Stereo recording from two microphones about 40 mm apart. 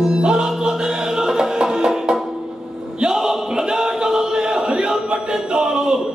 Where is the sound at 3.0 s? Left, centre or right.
Centre.